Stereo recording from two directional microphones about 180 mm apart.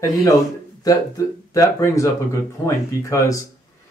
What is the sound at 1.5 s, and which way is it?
Speech, 15° left (ahead or behind).